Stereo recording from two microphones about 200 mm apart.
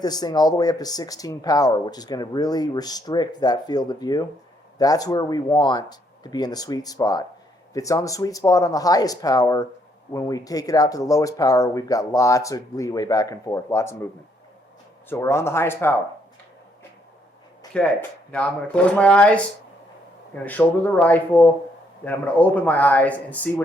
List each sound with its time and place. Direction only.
0.0 s speech: 20° left (ahead or behind)
15.1 s speech: 15° left (ahead or behind)
17.7 s speech: 5° left (ahead or behind)